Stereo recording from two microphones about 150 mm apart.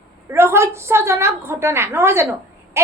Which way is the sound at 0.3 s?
15° right (ahead or behind).